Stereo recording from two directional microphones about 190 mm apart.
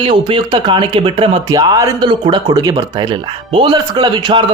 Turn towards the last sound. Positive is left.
turn(degrees=-25)  # may be behind; listen again after turning